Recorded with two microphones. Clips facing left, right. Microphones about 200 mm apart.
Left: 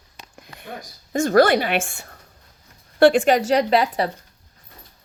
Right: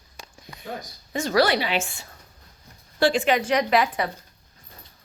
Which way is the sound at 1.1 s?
50° left (ahead or behind).